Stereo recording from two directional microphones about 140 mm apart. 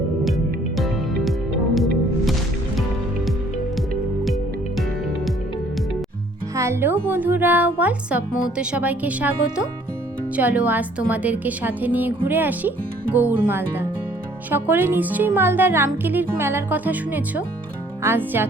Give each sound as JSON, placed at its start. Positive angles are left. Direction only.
{"t": 1.7, "sound": "music", "side_deg": 0}
{"t": 6.6, "sound": "music", "side_deg": -20}
{"t": 8.5, "sound": "speech", "side_deg": -10}